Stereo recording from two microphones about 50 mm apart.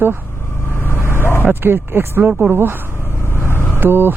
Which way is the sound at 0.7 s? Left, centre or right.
Left.